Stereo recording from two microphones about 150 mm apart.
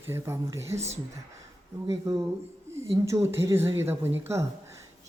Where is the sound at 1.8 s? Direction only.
25° right (ahead or behind).